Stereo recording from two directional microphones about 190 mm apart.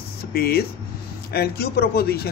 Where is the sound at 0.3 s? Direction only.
55° left (ahead or behind).